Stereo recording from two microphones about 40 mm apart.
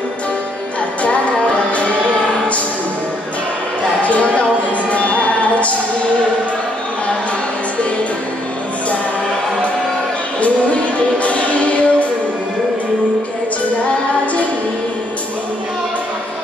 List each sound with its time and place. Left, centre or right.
4.0 s a sound: left
4.9 s music: left
11.2 s music: left